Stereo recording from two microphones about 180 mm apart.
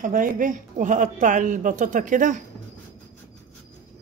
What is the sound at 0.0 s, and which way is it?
Speech, 50° right (ahead or behind).